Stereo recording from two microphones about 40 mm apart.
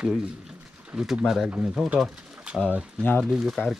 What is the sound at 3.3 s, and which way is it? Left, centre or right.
Speech, centre.